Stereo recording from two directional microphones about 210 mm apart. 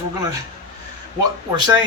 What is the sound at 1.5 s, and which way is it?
Speech, 20° right (ahead or behind).